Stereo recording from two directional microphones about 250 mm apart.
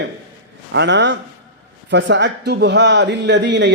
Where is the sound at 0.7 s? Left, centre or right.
Right.